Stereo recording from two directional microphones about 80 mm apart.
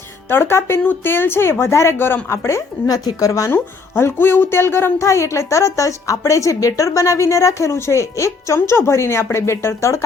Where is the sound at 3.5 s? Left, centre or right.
Left.